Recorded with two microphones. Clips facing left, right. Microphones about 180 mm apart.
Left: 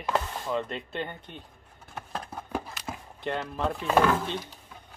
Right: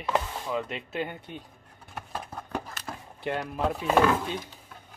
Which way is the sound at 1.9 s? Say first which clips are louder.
Even; centre (ahead or behind).